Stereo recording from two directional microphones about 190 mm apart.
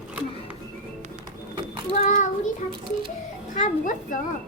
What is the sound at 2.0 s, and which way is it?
Child singing, 40° left (ahead or behind).